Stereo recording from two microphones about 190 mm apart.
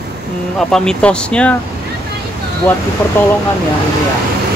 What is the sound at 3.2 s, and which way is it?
Speech, 10° left (ahead or behind).